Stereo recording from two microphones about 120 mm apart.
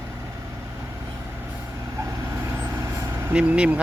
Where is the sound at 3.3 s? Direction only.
10° right (ahead or behind).